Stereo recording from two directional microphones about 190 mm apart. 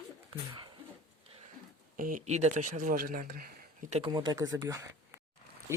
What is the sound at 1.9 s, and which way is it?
Speech, 45° right (ahead or behind).